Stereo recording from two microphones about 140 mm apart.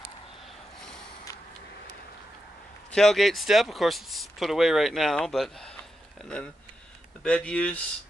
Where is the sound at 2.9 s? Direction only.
Centre (ahead or behind).